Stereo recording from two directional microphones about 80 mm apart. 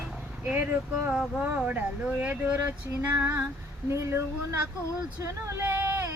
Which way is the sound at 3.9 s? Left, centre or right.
Right.